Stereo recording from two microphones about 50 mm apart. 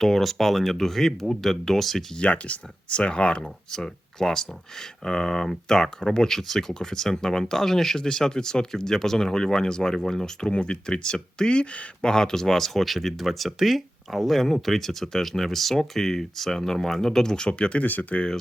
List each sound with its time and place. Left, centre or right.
0.0 s speech: centre
2.1 s speech: left
12.1 s speech: centre
17.8 s speech: left